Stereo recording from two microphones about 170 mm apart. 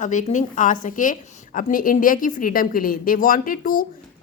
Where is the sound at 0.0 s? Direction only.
45° left (ahead or behind).